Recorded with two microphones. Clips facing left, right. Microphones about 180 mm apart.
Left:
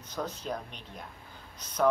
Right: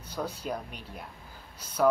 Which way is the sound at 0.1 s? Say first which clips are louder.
Right 1 dB; 10° right (ahead or behind).